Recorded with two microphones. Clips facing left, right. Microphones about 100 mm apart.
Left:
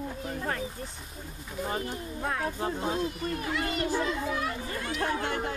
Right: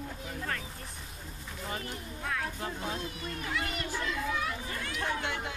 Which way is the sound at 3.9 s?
25° left (ahead or behind).